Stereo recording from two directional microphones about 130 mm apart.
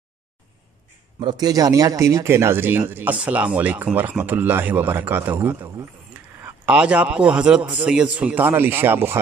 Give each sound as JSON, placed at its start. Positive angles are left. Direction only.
{"t": 1.2, "sound": "speech", "side_deg": -30}